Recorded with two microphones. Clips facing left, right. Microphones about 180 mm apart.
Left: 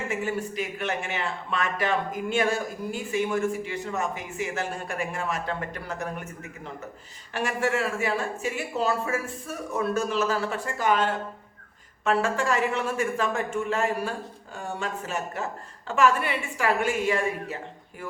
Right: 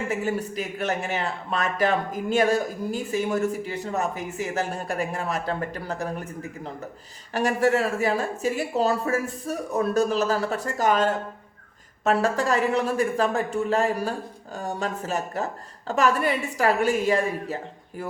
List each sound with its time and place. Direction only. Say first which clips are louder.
0.1 s speech: right 2 dB; 40° right (ahead or behind)